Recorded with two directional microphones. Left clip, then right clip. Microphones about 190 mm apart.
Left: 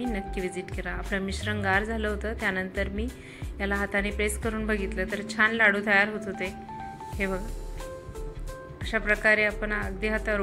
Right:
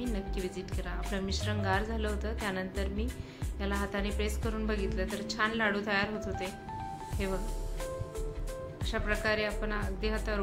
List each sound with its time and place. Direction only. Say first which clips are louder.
0.1 s a woman's voice: left 5 dB; 20° left (ahead or behind)
8.9 s a woman's voice: left 9 dB; 20° left (ahead or behind)